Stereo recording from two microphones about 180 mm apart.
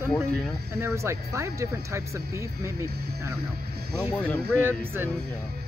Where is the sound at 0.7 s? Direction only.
15° right (ahead or behind).